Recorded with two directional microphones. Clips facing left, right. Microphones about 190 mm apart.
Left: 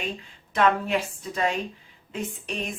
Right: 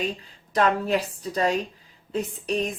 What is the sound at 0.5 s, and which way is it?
Speech, 35° right (ahead or behind).